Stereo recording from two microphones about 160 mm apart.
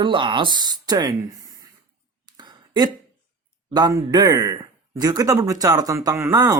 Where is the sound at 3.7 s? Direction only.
25° right (ahead or behind).